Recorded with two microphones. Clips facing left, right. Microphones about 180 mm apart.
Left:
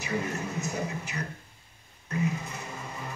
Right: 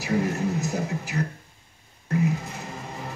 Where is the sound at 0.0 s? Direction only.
75° right (ahead or behind).